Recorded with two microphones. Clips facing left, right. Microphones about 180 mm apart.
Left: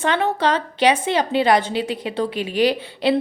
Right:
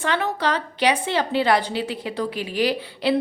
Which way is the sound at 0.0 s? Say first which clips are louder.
Left 4 dB; 25° left (ahead or behind).